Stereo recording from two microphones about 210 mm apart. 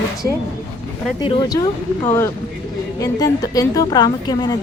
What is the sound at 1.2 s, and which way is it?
Speech, 20° left (ahead or behind).